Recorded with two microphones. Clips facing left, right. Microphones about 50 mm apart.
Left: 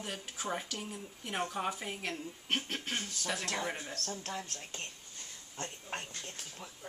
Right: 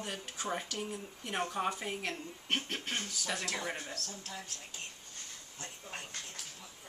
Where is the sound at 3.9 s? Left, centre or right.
Left.